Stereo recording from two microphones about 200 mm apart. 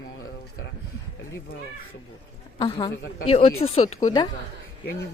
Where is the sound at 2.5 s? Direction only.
20° left (ahead or behind).